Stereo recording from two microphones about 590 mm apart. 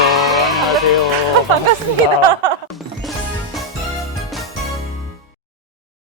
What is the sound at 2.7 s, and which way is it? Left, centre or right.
Music, centre.